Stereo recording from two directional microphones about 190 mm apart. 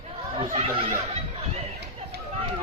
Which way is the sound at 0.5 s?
35° right (ahead or behind).